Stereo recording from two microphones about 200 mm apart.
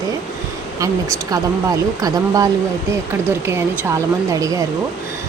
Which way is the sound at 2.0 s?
15° right (ahead or behind).